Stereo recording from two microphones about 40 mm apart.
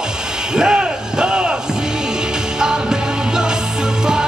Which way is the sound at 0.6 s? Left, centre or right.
Centre.